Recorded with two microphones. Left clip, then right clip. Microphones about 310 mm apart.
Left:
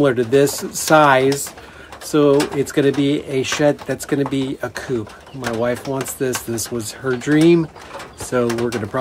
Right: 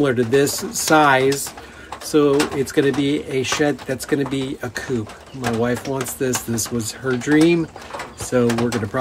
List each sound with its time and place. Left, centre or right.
0.0 s speech: centre